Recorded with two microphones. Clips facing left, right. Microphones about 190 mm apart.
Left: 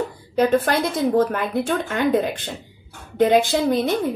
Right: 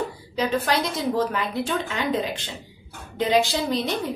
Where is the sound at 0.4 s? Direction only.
50° left (ahead or behind).